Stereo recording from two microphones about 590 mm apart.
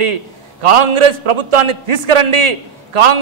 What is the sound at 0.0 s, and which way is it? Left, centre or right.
A man's voice, right.